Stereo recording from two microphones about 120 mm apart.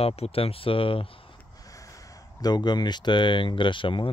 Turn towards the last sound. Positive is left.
turn(degrees=45)  # may be behind; listen again after turning